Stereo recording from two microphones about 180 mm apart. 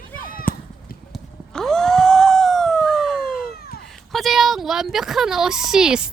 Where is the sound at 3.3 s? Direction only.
55° left (ahead or behind).